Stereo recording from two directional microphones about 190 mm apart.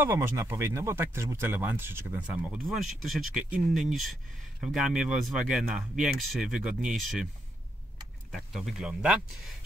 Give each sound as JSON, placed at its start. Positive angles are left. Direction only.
{"t": 0.0, "sound": "speech", "side_deg": -10}
{"t": 8.3, "sound": "speech", "side_deg": 0}